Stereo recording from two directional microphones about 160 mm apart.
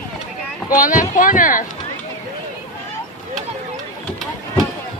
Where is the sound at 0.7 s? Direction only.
55° left (ahead or behind).